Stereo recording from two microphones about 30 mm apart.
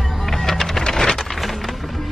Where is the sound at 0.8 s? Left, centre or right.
Left.